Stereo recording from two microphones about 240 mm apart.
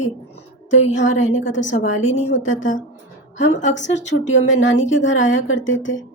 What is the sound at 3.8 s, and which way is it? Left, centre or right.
A woman's voice, left.